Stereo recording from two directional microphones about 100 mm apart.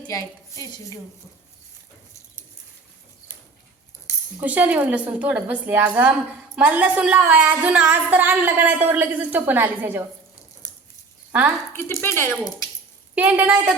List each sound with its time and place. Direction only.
0.1 s a woman's voice: 35° left (ahead or behind)
4.4 s speech: 15° right (ahead or behind)
11.3 s speech: 15° right (ahead or behind)
11.7 s speech: 25° left (ahead or behind)
13.1 s speech: 15° right (ahead or behind)